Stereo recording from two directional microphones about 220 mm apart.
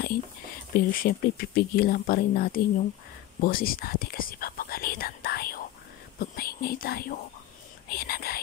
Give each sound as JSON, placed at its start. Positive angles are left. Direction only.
{"t": 0.7, "sound": "speech", "side_deg": 40}